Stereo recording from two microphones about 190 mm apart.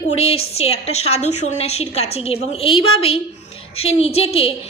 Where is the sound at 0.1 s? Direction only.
30° left (ahead or behind).